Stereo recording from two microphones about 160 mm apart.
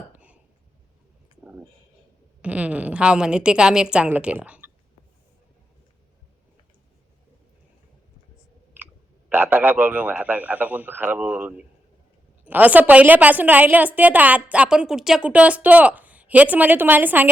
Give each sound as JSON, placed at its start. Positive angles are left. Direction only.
{"t": 0.1, "sound": "a sound", "side_deg": -10}
{"t": 2.4, "sound": "a woman's voice", "side_deg": -10}
{"t": 9.3, "sound": "a woman's voice", "side_deg": -10}